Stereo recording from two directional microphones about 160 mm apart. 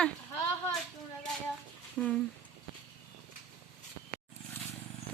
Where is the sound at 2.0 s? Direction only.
5° left (ahead or behind).